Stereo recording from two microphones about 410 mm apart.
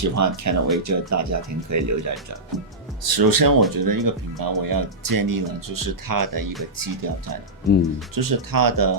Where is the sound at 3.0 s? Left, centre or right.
Right.